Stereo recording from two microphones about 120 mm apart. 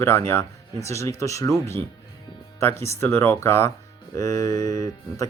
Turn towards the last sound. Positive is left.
turn(degrees=30)  # may be behind; listen again after turning